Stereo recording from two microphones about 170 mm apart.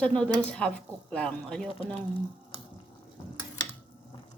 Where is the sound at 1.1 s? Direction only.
5° left (ahead or behind).